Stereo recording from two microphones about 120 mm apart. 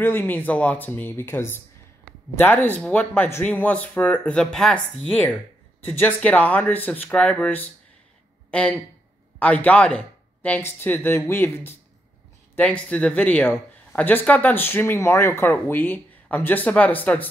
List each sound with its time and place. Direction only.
0.0 s speech: 20° left (ahead or behind)